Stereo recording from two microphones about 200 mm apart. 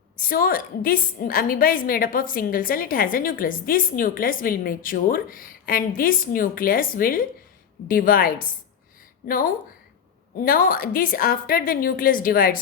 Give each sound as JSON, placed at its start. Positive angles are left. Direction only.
{"t": 0.2, "sound": "a woman's voice", "side_deg": 45}